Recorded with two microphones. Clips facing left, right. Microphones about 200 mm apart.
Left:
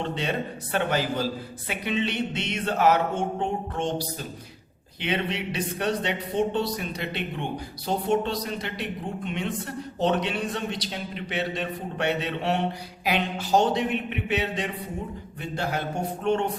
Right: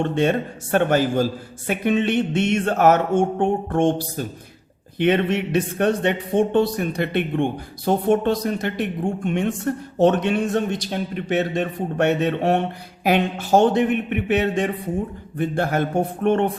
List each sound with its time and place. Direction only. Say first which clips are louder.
0.0 s a man's voice: right 8 dB; 50° right (ahead or behind)